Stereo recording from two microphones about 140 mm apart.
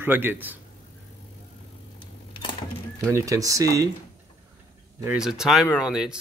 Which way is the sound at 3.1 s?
25° right (ahead or behind).